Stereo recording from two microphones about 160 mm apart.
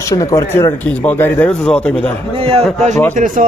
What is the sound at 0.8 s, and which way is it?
A man's voice, 10° left (ahead or behind).